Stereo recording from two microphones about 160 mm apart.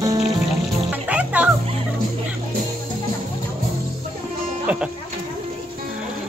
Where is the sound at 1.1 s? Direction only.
10° right (ahead or behind).